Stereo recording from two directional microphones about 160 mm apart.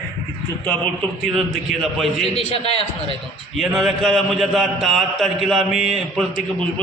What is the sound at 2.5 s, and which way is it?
Speech, 40° left (ahead or behind).